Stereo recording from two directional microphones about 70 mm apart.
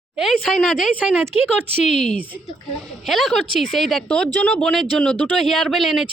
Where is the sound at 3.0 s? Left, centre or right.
Centre.